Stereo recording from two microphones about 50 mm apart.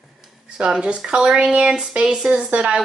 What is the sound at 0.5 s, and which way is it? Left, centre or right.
Speech, centre.